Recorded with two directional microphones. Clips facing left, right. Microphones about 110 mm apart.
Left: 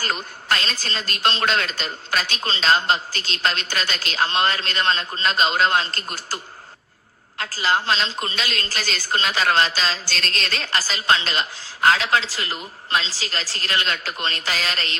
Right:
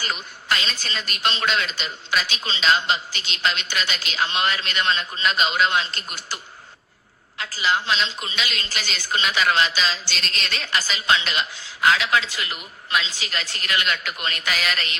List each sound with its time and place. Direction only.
0.0 s a woman's voice: 40° left (ahead or behind)